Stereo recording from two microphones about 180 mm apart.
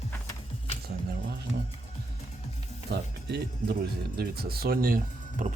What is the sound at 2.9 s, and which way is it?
A man's voice, 65° right (ahead or behind).